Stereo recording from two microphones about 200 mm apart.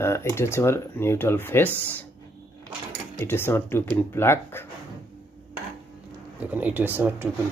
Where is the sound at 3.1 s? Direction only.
10° left (ahead or behind).